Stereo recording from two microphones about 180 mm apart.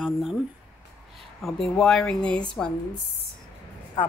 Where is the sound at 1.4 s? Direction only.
Centre (ahead or behind).